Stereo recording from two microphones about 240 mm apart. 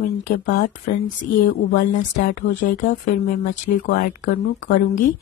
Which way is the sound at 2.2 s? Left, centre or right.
Left.